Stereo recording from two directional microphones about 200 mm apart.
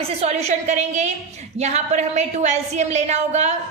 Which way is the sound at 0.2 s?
35° right (ahead or behind).